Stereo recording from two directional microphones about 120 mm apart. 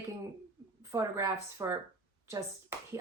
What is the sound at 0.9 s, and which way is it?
Speech, 25° right (ahead or behind).